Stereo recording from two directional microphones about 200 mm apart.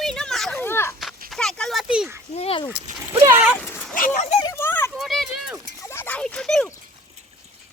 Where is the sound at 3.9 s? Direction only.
40° left (ahead or behind).